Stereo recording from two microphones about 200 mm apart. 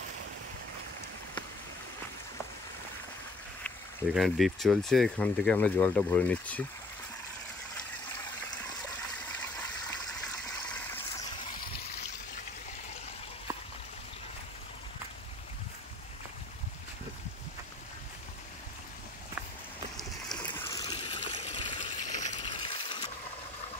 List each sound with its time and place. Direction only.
3.6 s speech: centre (ahead or behind)
20.0 s boat: centre (ahead or behind)
20.6 s water: 20° left (ahead or behind); by 22.4 s 35° left (ahead or behind)
22.4 s a sound: 25° left (ahead or behind)